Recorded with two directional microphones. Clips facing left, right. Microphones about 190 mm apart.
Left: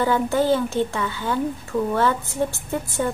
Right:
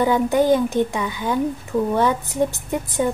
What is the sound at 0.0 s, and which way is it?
Speech, 15° right (ahead or behind).